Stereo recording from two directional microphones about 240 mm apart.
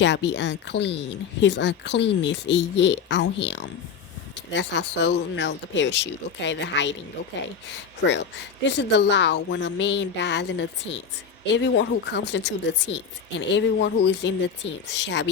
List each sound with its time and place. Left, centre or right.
0.0 s speech: left